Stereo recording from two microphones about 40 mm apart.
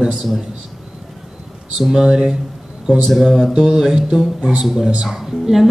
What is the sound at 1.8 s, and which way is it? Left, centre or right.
Speech, centre.